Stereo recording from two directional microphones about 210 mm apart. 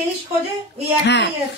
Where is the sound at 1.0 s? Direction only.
55° left (ahead or behind).